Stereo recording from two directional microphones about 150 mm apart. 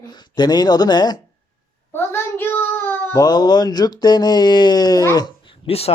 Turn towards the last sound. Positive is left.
turn(degrees=40)  # may be behind; listen again after turning